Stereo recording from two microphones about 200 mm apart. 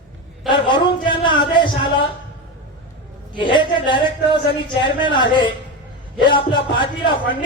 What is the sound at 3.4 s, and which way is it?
Speech, 25° left (ahead or behind).